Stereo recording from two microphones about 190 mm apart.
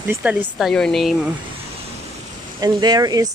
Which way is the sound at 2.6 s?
20° right (ahead or behind).